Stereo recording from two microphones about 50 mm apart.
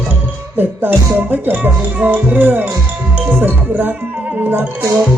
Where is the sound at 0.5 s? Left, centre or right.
Right.